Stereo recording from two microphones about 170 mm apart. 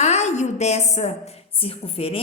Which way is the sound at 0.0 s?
40° left (ahead or behind).